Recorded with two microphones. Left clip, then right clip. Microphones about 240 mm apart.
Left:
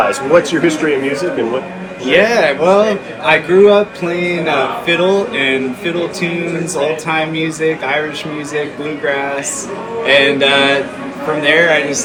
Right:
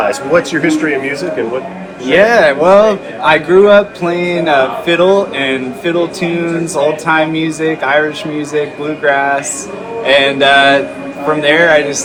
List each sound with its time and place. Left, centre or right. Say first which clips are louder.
0.1 s a man's voice: even; centre
2.0 s a man's voice: right 3 dB; centre